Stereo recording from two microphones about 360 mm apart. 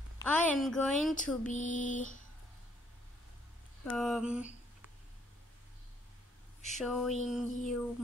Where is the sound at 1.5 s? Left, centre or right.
Left.